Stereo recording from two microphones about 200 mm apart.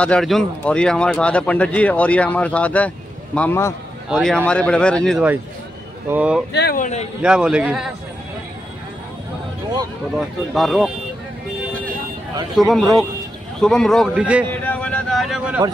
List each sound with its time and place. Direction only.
0.0 s a man's voice: 5° left (ahead or behind)
6.0 s speech: 5° right (ahead or behind)
6.5 s speech: 50° left (ahead or behind)
7.2 s a man's voice: 5° right (ahead or behind)
10.1 s a man's voice: centre (ahead or behind)
12.5 s a man's voice: centre (ahead or behind)
14.6 s a sound: 5° left (ahead or behind)